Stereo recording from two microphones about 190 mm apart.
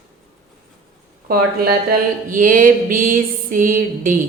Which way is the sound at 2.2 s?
45° right (ahead or behind).